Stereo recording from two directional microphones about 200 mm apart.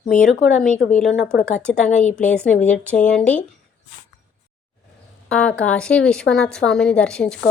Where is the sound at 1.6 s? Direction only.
5° left (ahead or behind).